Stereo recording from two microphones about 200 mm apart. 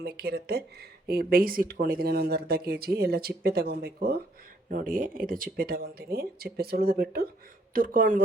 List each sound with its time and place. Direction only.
0.0 s speech: 50° right (ahead or behind)